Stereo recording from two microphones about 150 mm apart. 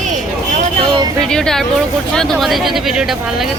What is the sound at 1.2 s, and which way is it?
Speech, 5° left (ahead or behind).